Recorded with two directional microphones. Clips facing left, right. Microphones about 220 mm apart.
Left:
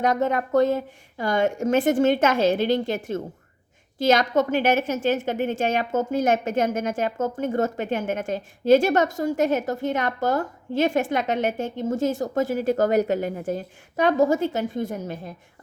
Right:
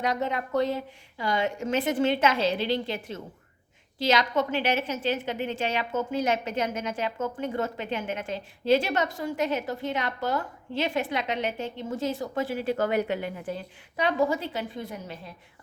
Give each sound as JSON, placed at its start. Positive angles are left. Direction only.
{"t": 0.0, "sound": "a woman's voice", "side_deg": 50}